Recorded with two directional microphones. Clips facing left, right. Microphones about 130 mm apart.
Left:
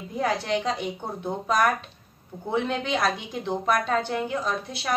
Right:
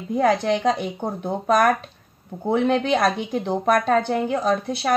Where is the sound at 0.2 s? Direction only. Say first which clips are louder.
Right 6 dB; 50° right (ahead or behind).